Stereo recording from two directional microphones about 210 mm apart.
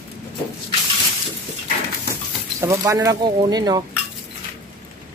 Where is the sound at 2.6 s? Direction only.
15° right (ahead or behind).